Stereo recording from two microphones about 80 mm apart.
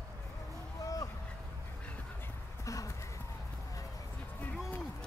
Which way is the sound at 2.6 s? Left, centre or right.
Left.